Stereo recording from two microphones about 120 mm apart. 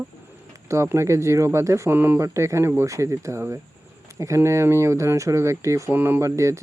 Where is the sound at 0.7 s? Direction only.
25° right (ahead or behind).